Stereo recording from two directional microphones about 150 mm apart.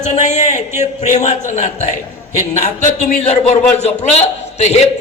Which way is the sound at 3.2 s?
45° left (ahead or behind).